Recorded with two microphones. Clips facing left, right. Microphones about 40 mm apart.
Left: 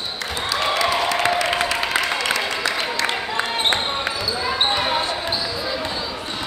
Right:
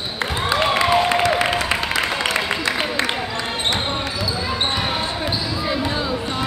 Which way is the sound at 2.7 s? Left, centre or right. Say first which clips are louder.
Right 3 dB; right.